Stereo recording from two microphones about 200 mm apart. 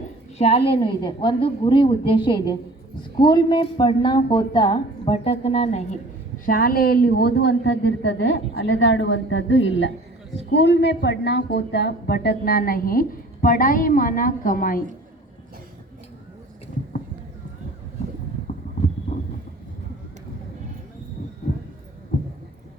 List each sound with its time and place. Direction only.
0.3 s a woman's voice: 30° left (ahead or behind)
6.4 s a woman's voice: 45° left (ahead or behind); by 9.9 s 70° left (ahead or behind)
10.5 s a woman's voice: 60° left (ahead or behind); by 14.8 s 45° left (ahead or behind)
19.1 s a sound: 35° left (ahead or behind)